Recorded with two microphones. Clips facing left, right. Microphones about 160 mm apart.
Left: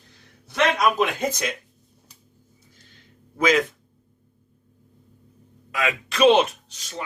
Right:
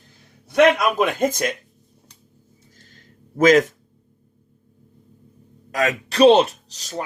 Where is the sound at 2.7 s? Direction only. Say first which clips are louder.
Right 3 dB; 45° right (ahead or behind).